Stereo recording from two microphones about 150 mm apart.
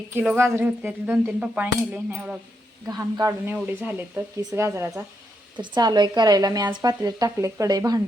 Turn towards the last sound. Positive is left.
turn(degrees=-25)  # may be behind; listen again after turning